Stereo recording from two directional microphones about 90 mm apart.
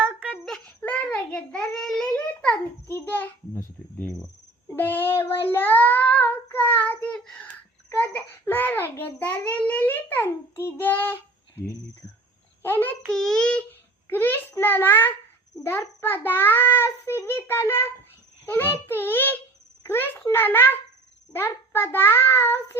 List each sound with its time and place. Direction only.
0.0 s a sound: 20° right (ahead or behind)
0.4 s child singing: 10° left (ahead or behind)
2.2 s a sound: 15° left (ahead or behind)
2.8 s a child's voice: 25° left (ahead or behind)
4.8 s child singing: 20° left (ahead or behind)
7.9 s a child's voice: 20° left (ahead or behind)
13.1 s a child's voice: 5° left (ahead or behind); by 22.8 s 30° left (ahead or behind)